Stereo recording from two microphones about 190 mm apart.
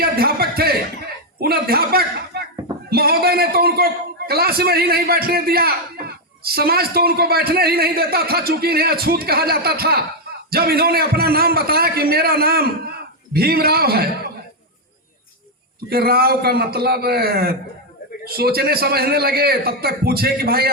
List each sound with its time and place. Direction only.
0.0 s a sound: 55° right (ahead or behind)
2.9 s a man's voice: 55° right (ahead or behind)
15.9 s a man's voice: 55° right (ahead or behind)